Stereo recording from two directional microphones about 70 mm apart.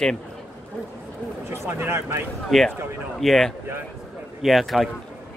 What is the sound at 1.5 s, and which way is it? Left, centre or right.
Speech, right.